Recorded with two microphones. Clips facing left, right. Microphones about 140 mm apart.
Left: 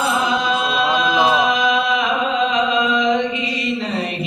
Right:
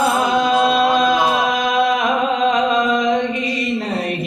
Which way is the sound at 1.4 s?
45° right (ahead or behind).